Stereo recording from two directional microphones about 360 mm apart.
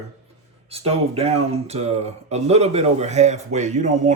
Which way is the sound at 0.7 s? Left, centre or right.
Centre.